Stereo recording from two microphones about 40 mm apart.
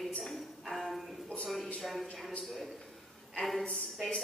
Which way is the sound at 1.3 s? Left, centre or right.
Left.